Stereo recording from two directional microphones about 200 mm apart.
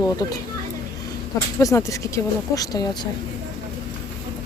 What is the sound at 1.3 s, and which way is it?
Speech, 15° left (ahead or behind).